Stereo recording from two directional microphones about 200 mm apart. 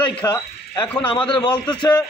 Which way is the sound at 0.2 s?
10° left (ahead or behind).